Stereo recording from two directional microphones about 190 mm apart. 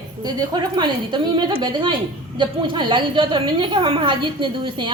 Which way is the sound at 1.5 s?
25° right (ahead or behind).